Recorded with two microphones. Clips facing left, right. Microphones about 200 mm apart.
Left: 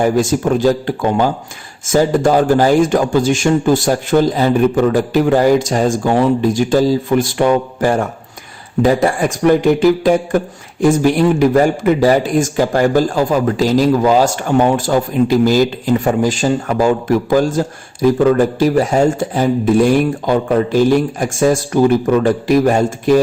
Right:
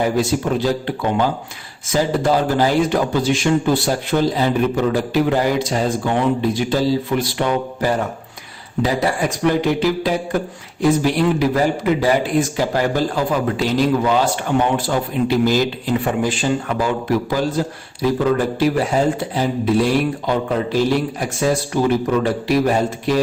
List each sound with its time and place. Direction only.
0.0 s a man's voice: 45° left (ahead or behind)